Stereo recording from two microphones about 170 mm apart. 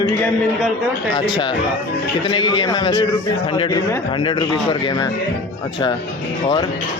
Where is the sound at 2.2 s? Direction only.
30° left (ahead or behind).